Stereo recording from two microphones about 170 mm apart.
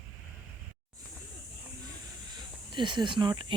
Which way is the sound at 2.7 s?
25° right (ahead or behind).